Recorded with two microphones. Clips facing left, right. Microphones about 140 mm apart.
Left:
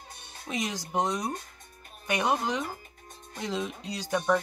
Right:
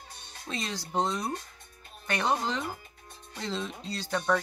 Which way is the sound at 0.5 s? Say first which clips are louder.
Left 3 dB; 15° left (ahead or behind).